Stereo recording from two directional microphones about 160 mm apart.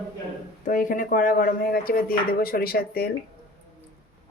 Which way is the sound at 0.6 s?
55° left (ahead or behind).